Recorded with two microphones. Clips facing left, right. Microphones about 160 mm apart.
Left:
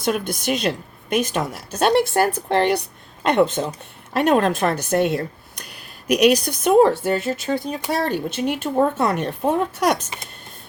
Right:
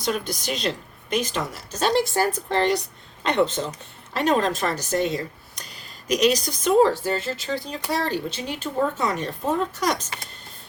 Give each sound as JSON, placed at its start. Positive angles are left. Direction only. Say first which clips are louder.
{"t": 0.0, "sound": "speech", "louder": "left 4 dB", "side_deg": 55}